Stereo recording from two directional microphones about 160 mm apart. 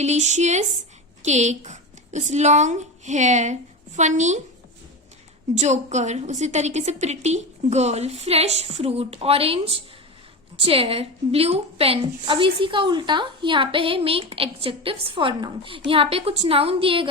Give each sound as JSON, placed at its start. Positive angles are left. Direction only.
{"t": 0.0, "sound": "a woman's voice", "side_deg": -45}
{"t": 5.5, "sound": "a woman's voice", "side_deg": -45}